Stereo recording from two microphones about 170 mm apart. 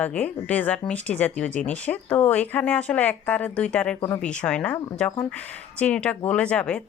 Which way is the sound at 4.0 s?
15° left (ahead or behind).